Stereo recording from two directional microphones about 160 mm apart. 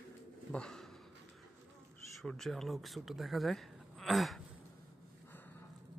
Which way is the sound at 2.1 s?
Centre (ahead or behind).